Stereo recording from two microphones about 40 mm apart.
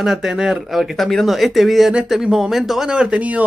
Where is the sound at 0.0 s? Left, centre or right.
Centre.